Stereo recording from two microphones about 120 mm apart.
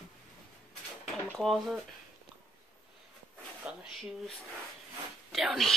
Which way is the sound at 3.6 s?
10° right (ahead or behind).